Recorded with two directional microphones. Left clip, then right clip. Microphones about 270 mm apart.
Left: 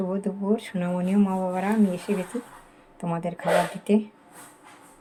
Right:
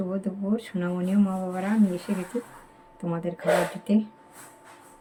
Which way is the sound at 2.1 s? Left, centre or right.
Left.